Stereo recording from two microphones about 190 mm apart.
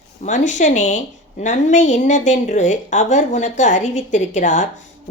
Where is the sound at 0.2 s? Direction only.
40° left (ahead or behind).